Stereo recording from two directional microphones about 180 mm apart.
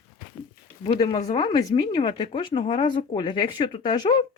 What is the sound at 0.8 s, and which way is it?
Speech, 25° left (ahead or behind).